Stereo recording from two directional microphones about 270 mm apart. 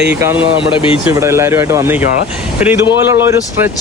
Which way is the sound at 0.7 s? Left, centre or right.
Centre.